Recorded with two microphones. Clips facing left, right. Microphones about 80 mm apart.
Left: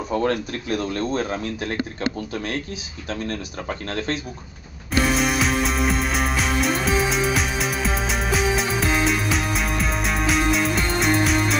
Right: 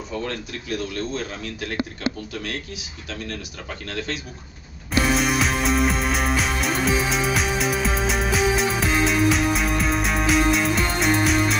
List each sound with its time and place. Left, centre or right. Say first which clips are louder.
0.1 s speech: left 7 dB; left
3.1 s speech: left 5 dB; left
5.0 s music: even; centre